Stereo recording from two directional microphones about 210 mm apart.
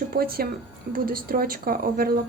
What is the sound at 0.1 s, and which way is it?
Speech, 45° right (ahead or behind).